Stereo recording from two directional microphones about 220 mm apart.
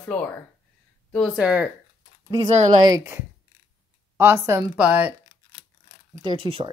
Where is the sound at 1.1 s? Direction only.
Centre (ahead or behind).